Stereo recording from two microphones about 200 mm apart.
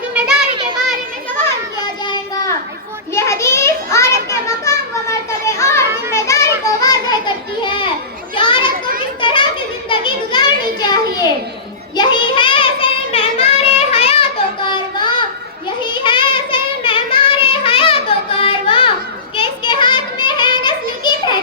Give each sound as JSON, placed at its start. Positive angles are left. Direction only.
{"t": 0.1, "sound": "children playing", "side_deg": -5}
{"t": 0.5, "sound": "children playing", "side_deg": -25}
{"t": 3.2, "sound": "a sound", "side_deg": 15}
{"t": 6.1, "sound": "children playing", "side_deg": 15}
{"t": 9.9, "sound": "a sound", "side_deg": 25}
{"t": 11.9, "sound": "child singing", "side_deg": 25}
{"t": 18.4, "sound": "music", "side_deg": 25}
{"t": 19.4, "sound": "child singing", "side_deg": 25}